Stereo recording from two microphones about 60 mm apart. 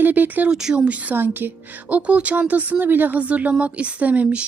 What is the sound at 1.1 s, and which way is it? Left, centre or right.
A woman's voice, right.